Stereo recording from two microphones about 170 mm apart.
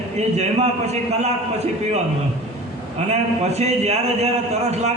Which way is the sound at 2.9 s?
40° right (ahead or behind).